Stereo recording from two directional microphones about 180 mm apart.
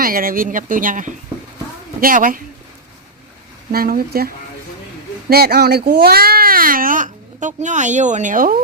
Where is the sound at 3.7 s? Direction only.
55° right (ahead or behind).